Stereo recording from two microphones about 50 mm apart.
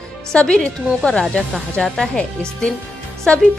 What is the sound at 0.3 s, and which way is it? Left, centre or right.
Speech, centre.